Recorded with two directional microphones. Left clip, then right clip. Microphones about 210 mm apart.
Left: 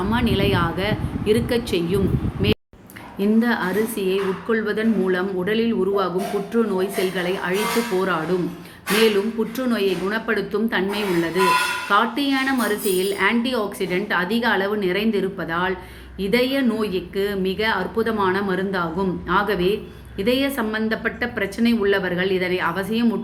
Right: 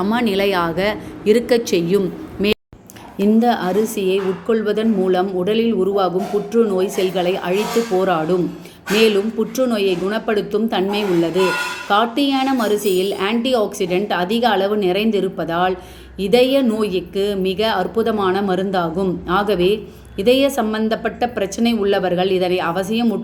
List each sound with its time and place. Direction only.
0.1 s a woman's voice: 35° right (ahead or behind)
9.6 s speech: 20° right (ahead or behind)